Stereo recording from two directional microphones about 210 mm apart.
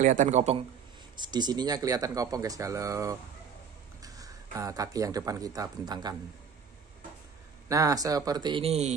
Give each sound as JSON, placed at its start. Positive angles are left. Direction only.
{"t": 0.0, "sound": "a man's voice", "side_deg": -35}
{"t": 1.1, "sound": "speech", "side_deg": -20}
{"t": 7.6, "sound": "speech", "side_deg": -15}